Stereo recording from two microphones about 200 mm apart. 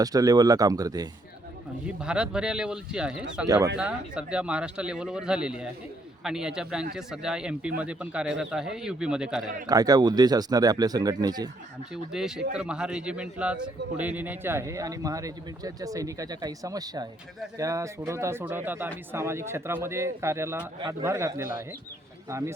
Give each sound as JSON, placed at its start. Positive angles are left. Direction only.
{"t": 0.0, "sound": "a man's voice", "side_deg": -20}
{"t": 1.9, "sound": "a man's voice", "side_deg": -5}
{"t": 3.4, "sound": "a man's voice", "side_deg": -15}
{"t": 3.8, "sound": "a man's voice", "side_deg": -5}
{"t": 9.6, "sound": "speech", "side_deg": -20}
{"t": 12.1, "sound": "a man's voice", "side_deg": -5}